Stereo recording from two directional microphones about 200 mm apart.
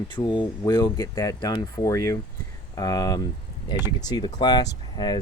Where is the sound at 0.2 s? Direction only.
20° left (ahead or behind).